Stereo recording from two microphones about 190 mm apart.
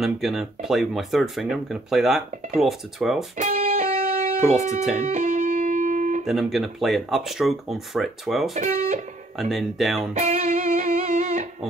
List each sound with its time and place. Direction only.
0.0 s speech: centre (ahead or behind)
3.3 s music: 35° right (ahead or behind)
3.8 s music: 45° right (ahead or behind)
6.2 s speech: centre (ahead or behind)
8.5 s speech: 40° right (ahead or behind)
9.4 s speech: centre (ahead or behind)
10.1 s music: 35° right (ahead or behind)